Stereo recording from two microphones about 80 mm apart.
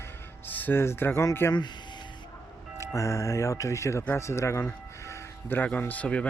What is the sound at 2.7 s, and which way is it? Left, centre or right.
Speech, left.